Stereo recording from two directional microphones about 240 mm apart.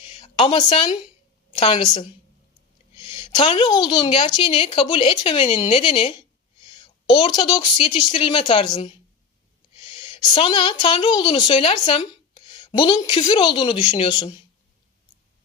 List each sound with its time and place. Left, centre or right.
0.1 s a woman's voice: centre